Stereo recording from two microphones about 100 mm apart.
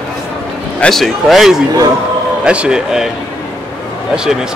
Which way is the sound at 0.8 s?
Centre (ahead or behind).